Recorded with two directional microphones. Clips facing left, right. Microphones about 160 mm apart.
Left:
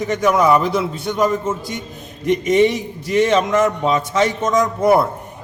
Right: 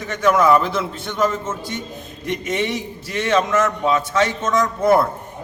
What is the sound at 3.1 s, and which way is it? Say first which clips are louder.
A man's voice: left 4 dB; 20° left (ahead or behind).